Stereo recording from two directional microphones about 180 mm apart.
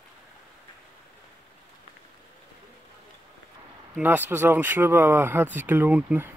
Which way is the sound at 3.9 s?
10° right (ahead or behind).